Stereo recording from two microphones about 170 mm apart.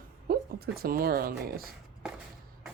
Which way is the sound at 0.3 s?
65° right (ahead or behind).